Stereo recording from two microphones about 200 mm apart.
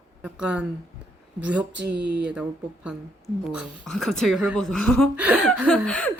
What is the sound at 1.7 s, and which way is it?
Speech, 60° right (ahead or behind).